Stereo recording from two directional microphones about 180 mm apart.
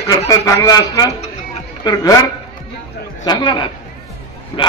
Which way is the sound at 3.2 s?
20° left (ahead or behind).